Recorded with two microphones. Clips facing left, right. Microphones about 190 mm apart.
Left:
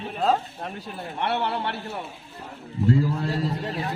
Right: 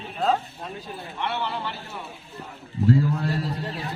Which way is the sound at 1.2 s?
65° left (ahead or behind).